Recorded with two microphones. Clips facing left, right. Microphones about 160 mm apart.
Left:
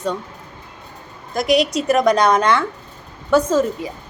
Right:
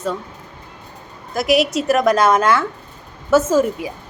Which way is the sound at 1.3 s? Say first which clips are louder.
Even; 5° right (ahead or behind).